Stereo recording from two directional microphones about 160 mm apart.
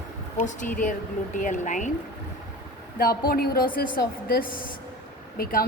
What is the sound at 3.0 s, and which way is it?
Speech, 70° left (ahead or behind).